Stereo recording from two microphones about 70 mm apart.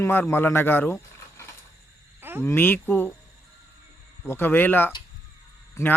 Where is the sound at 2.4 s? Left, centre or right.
Left.